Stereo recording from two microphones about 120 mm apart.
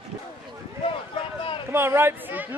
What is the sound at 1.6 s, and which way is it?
Speech, 20° right (ahead or behind).